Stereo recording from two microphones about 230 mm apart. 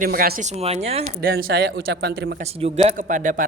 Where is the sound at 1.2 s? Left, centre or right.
Right.